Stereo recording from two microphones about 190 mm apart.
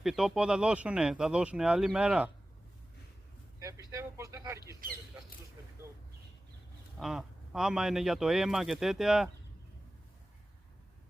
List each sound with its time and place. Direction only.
0.0 s speech: centre (ahead or behind)
3.9 s speech: 15° right (ahead or behind)
4.8 s speech: 45° right (ahead or behind)
7.0 s speech: 5° right (ahead or behind)